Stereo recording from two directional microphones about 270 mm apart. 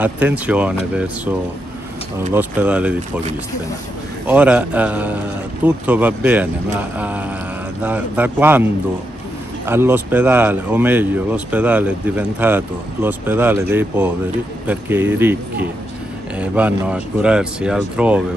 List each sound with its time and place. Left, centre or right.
0.0 s speech: centre
2.3 s speech: centre
4.3 s speech: centre
9.7 s speech: centre
16.3 s speech: centre